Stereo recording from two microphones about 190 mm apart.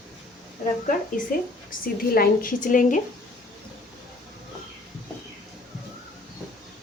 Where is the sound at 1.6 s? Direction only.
50° left (ahead or behind).